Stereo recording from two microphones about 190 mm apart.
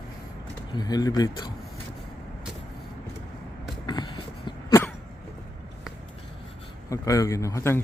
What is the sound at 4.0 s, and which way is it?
Vehicle, 25° left (ahead or behind).